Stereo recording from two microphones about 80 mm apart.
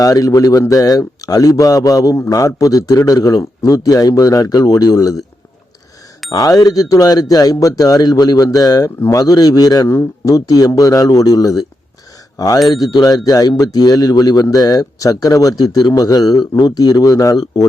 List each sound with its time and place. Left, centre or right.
0.0 s speech: left
6.3 s speech: left
12.6 s speech: left